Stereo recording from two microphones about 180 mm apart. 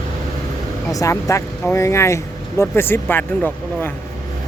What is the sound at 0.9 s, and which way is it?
Speech, 20° left (ahead or behind).